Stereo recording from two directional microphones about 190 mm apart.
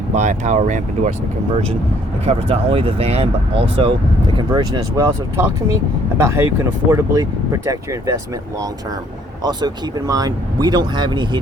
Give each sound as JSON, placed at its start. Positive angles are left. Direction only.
{"t": 0.1, "sound": "speech", "side_deg": -40}
{"t": 2.2, "sound": "speech", "side_deg": -30}
{"t": 9.4, "sound": "speech", "side_deg": -20}